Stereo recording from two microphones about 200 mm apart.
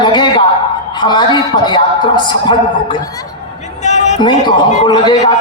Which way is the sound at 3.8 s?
35° left (ahead or behind).